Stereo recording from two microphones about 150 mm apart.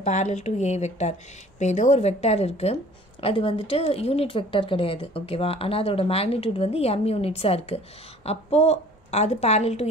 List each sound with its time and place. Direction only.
0.0 s a woman's voice: 50° left (ahead or behind)